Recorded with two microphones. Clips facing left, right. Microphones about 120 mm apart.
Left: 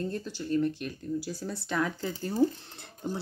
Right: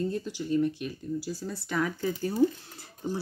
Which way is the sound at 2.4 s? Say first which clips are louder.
Right 1 dB; 35° left (ahead or behind).